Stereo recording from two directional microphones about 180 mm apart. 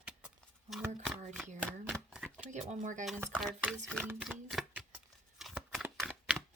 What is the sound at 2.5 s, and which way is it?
Speech, 40° right (ahead or behind).